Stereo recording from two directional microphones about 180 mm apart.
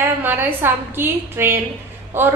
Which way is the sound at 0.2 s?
10° right (ahead or behind).